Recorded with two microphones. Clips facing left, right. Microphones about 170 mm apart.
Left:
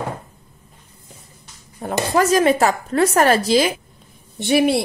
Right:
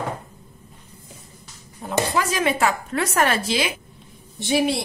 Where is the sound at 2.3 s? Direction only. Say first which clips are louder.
Left 6 dB; 40° left (ahead or behind).